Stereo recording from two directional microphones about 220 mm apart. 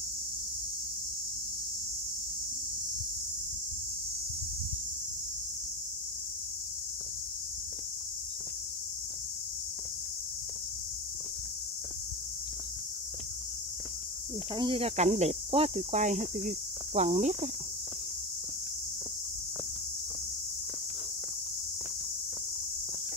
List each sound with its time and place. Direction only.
14.5 s speech: 20° right (ahead or behind)